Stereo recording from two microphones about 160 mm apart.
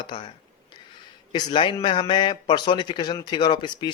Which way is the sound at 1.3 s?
30° left (ahead or behind).